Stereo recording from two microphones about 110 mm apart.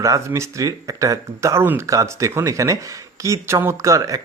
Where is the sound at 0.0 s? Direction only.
30° right (ahead or behind).